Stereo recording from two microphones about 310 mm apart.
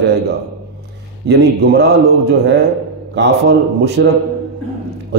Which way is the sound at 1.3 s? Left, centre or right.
Right.